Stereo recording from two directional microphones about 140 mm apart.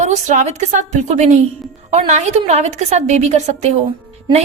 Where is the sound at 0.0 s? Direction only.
60° right (ahead or behind).